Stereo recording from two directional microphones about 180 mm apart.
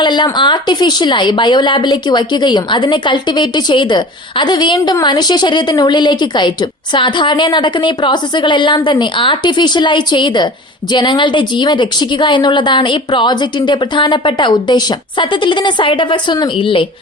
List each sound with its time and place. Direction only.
0.0 s a woman's voice: 25° left (ahead or behind)